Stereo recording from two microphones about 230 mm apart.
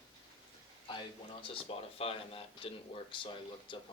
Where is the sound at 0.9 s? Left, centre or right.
Left.